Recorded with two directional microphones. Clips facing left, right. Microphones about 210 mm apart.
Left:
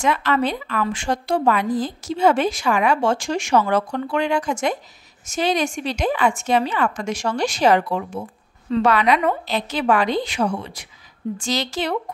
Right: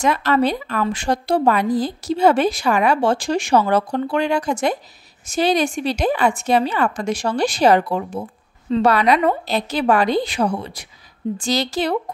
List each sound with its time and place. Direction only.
0.0 s a woman's voice: 40° right (ahead or behind)